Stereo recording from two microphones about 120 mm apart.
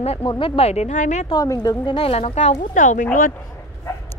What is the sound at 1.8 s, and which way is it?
Speech, 50° left (ahead or behind).